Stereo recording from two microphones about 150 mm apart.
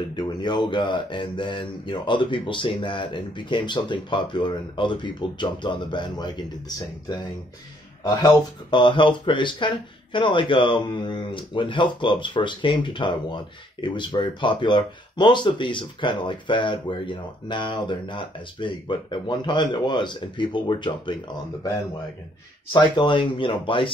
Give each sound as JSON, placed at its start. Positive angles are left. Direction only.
{"t": 0.1, "sound": "speech", "side_deg": 30}
{"t": 8.1, "sound": "speech", "side_deg": 25}
{"t": 22.7, "sound": "speech", "side_deg": 30}